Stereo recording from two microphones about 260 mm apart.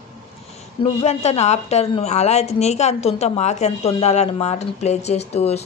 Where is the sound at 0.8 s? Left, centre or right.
Left.